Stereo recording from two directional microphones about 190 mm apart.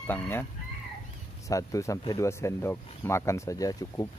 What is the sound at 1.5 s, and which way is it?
Speech, 15° left (ahead or behind).